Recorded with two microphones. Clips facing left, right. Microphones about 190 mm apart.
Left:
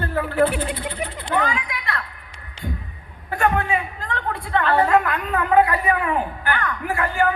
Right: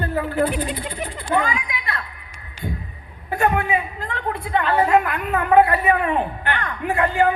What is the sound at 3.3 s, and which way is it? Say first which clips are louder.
A woman's voice: right 1 dB; 20° right (ahead or behind).